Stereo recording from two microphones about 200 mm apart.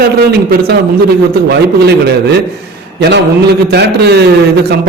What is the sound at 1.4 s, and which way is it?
A man's voice, 55° right (ahead or behind).